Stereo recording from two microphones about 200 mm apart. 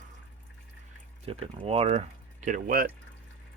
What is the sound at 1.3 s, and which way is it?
Speech, 30° right (ahead or behind).